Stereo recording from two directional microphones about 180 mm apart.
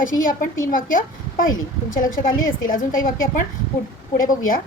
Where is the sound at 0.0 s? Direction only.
50° left (ahead or behind).